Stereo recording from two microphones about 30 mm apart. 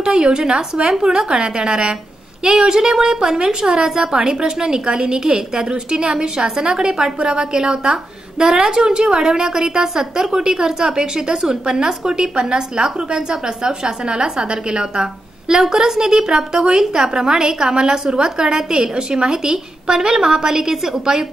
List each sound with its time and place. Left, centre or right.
0.0 s a woman's voice: right
15.6 s a woman's voice: centre
20.7 s a woman's voice: centre